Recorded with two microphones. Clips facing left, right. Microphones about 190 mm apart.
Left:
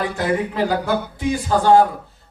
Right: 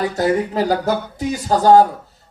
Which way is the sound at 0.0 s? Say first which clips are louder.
Right 3 dB; 40° right (ahead or behind).